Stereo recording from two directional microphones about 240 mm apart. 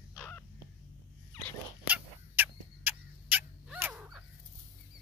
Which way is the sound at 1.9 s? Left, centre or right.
Centre.